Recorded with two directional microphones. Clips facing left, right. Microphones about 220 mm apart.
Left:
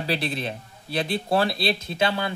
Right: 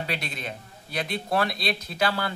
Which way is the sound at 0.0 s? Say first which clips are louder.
Left 6 dB; 30° left (ahead or behind).